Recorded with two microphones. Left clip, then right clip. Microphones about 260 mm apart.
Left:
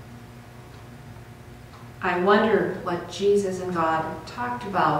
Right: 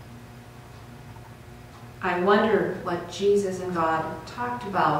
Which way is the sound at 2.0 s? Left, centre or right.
Centre.